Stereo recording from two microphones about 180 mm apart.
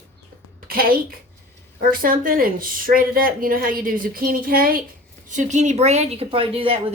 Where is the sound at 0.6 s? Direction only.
55° right (ahead or behind).